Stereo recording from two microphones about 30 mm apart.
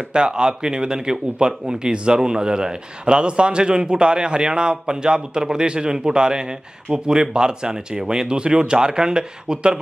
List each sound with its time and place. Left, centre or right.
0.1 s a man's voice: right